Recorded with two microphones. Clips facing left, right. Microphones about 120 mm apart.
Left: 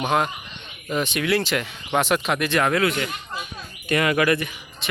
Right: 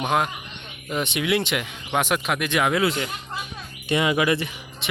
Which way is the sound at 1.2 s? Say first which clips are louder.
Even; 15° right (ahead or behind).